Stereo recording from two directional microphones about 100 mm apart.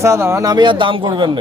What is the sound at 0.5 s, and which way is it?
Speech, 55° right (ahead or behind).